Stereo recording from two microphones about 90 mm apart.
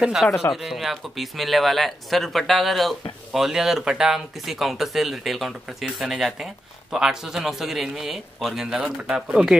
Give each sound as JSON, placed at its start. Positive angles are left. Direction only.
{"t": 0.0, "sound": "speech", "side_deg": -5}